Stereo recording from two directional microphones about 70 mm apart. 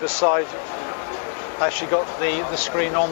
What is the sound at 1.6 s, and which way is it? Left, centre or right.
Speech, left.